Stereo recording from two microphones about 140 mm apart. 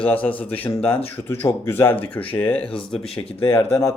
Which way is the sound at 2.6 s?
40° left (ahead or behind).